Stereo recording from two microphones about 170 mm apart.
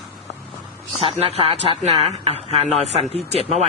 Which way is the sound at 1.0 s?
35° right (ahead or behind).